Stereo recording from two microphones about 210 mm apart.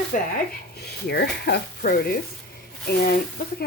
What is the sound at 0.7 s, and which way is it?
A woman's voice, 50° left (ahead or behind).